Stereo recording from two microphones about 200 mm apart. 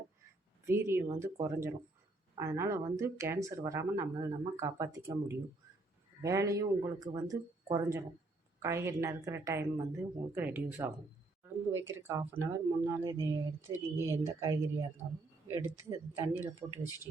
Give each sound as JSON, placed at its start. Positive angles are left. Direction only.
{"t": 0.6, "sound": "speech", "side_deg": -10}